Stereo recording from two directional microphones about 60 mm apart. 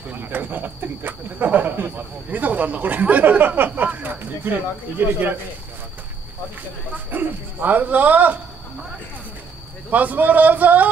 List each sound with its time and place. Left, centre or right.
0.1 s speech: right
7.1 s speech: right
9.8 s speech: right